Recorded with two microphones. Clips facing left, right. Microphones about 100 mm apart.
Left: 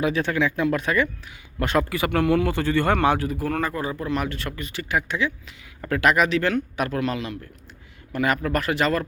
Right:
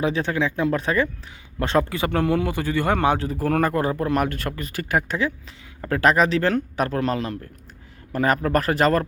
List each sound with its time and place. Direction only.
0.0 s speech: 25° right (ahead or behind)
2.6 s speech: 15° right (ahead or behind)
3.2 s speech: 40° right (ahead or behind)
3.5 s speech: 55° right (ahead or behind)